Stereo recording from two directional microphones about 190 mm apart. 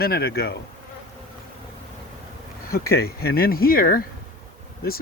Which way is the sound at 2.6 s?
55° left (ahead or behind).